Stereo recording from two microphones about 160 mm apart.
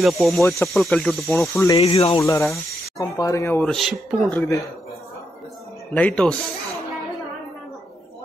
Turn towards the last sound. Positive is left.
turn(degrees=5)  # may be behind; listen again after turning